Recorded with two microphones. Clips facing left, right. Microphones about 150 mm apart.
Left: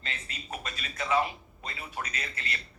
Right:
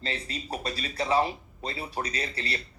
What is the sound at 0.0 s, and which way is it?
Speech, 35° right (ahead or behind).